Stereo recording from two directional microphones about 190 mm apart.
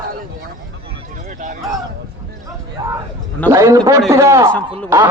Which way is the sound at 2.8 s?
20° right (ahead or behind).